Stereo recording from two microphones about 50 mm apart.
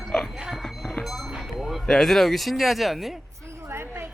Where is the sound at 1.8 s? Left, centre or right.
Centre.